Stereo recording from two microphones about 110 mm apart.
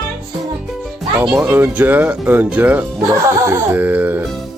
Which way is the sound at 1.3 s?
10° right (ahead or behind).